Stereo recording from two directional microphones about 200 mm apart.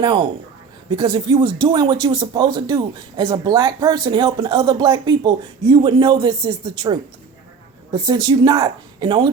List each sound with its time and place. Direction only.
0.0 s speech: 20° right (ahead or behind)
7.9 s speech: 20° right (ahead or behind)